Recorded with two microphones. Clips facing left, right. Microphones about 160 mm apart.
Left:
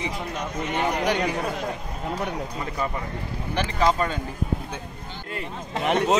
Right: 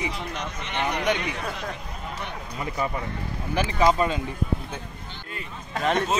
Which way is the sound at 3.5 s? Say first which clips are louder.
Right 1 dB; 10° right (ahead or behind).